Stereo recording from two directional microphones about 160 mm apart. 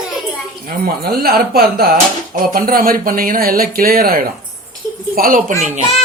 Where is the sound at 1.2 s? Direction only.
65° right (ahead or behind).